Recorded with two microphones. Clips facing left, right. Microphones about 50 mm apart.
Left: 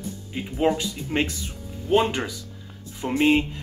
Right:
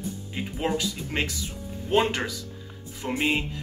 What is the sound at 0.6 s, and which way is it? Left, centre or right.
Speech, centre.